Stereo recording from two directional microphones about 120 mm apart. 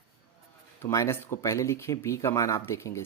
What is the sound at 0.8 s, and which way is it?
Speech, 25° left (ahead or behind).